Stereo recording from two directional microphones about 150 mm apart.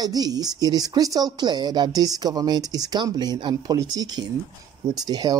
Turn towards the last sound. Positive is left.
turn(degrees=-25)  # may be behind; listen again after turning